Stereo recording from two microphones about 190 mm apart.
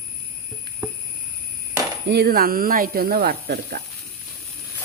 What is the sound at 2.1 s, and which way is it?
Speech, 55° right (ahead or behind).